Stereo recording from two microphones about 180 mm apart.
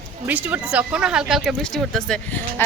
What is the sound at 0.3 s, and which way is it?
Speech, 10° right (ahead or behind).